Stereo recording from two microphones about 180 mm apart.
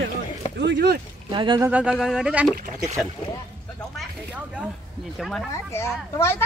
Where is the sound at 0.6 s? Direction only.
70° right (ahead or behind).